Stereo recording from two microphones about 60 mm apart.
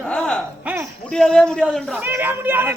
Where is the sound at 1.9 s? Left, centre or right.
Right.